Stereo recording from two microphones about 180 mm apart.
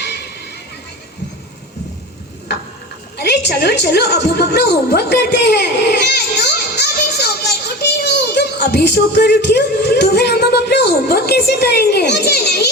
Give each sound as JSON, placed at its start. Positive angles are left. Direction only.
{"t": 3.2, "sound": "a woman's voice", "side_deg": 65}